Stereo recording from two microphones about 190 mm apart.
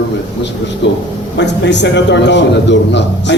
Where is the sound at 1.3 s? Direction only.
70° left (ahead or behind).